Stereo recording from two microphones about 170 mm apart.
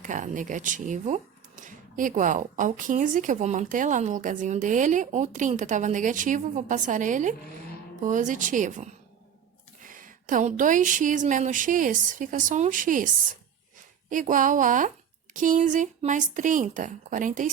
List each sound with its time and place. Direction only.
0.0 s speech: 50° right (ahead or behind)
14.1 s speech: 50° right (ahead or behind)